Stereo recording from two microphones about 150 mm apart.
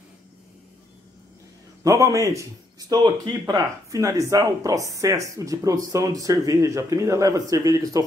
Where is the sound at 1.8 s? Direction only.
20° right (ahead or behind).